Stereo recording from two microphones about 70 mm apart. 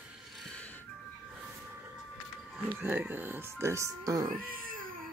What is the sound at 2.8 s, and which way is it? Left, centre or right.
Speech, right.